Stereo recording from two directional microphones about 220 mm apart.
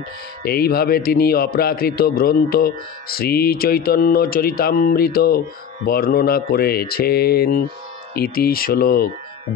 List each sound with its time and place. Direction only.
0.4 s a man's voice: 45° left (ahead or behind)